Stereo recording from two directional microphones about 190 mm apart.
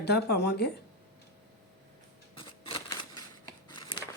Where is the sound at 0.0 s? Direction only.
60° left (ahead or behind).